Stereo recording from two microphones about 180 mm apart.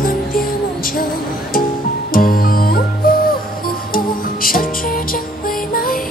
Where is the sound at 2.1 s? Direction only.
50° left (ahead or behind).